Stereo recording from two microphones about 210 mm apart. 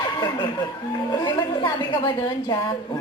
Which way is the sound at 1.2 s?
20° left (ahead or behind).